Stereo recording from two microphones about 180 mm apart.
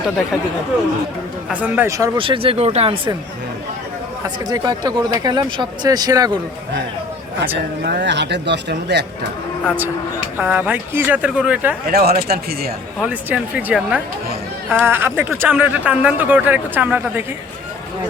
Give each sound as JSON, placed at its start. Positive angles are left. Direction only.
{"t": 1.5, "sound": "speech", "side_deg": -10}
{"t": 2.1, "sound": "speech", "side_deg": -30}
{"t": 4.2, "sound": "speech", "side_deg": -20}
{"t": 7.5, "sound": "speech", "side_deg": -65}
{"t": 9.7, "sound": "speech", "side_deg": -10}
{"t": 11.9, "sound": "speech", "side_deg": -60}
{"t": 13.0, "sound": "speech", "side_deg": -5}